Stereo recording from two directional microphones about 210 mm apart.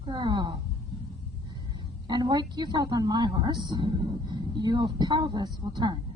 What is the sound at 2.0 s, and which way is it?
A woman's voice, 20° right (ahead or behind).